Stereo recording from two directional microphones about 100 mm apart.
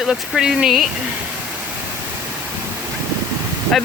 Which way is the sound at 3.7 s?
5° left (ahead or behind).